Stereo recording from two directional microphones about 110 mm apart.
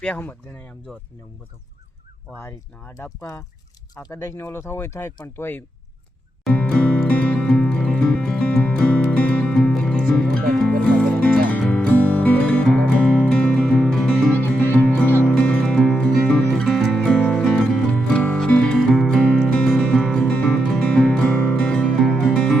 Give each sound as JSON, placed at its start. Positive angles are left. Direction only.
{"t": 0.0, "sound": "speech", "side_deg": 10}
{"t": 2.4, "sound": "speech", "side_deg": 25}
{"t": 6.5, "sound": "music", "side_deg": 10}
{"t": 14.3, "sound": "music", "side_deg": 15}